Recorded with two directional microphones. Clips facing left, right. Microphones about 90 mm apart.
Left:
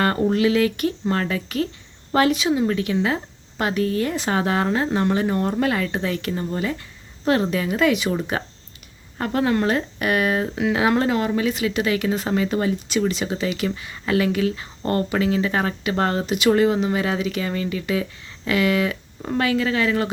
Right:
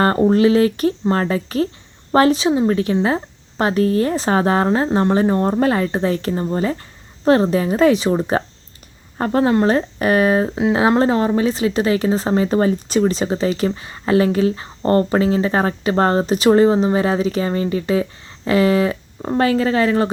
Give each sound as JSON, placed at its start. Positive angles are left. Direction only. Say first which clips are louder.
{"t": 0.0, "sound": "speech", "louder": "right 5 dB", "side_deg": -30}